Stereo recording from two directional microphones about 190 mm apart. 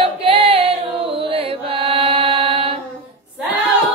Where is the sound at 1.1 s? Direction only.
30° right (ahead or behind).